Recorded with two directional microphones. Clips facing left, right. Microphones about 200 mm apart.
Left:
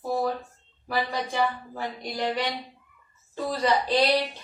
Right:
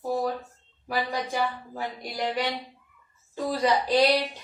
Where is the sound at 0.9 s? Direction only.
10° right (ahead or behind).